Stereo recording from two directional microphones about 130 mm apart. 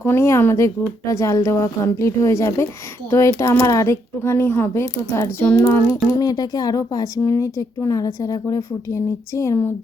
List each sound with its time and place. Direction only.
0.0 s speech: 20° left (ahead or behind)